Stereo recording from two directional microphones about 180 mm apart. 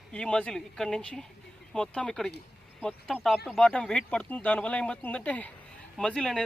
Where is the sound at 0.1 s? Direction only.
5° left (ahead or behind).